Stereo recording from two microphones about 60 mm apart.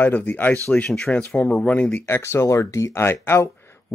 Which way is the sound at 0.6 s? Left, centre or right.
Centre.